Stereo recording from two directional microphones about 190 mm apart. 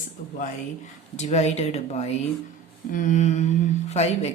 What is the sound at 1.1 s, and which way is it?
Speech, 35° left (ahead or behind).